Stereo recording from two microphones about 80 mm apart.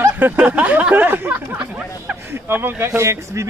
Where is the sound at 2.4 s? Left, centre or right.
Right.